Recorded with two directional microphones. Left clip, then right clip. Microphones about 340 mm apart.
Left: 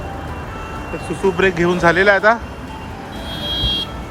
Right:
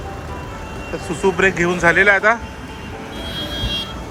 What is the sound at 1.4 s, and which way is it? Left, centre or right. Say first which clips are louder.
Speech: left 1 dB; centre.